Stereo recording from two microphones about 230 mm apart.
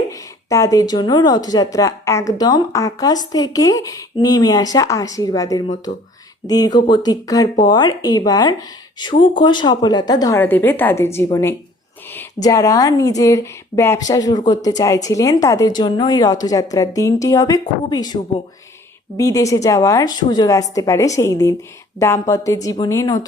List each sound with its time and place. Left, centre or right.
0.1 s speech: centre
5.9 s speech: left
6.5 s speech: centre